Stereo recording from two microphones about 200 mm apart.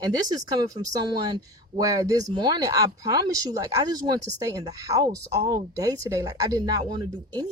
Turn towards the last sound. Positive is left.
turn(degrees=-20)  # may be behind; listen again after turning